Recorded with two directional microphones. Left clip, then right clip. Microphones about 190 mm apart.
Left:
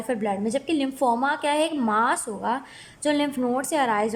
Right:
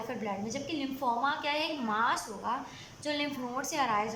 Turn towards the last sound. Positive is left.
turn(degrees=40)  # may be behind; listen again after turning